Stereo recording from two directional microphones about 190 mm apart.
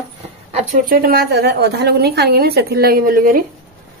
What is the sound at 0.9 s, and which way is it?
Speech, 55° right (ahead or behind).